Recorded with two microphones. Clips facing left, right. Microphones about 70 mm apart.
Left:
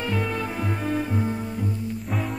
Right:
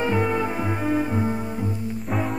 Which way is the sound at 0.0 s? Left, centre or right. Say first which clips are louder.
Right 5 dB; right.